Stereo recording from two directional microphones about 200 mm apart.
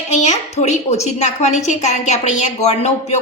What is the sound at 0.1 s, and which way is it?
A woman's voice, 35° left (ahead or behind).